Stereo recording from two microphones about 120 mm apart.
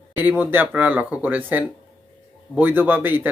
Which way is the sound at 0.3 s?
15° right (ahead or behind).